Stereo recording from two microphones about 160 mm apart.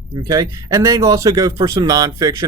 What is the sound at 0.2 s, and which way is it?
Speech, 20° right (ahead or behind).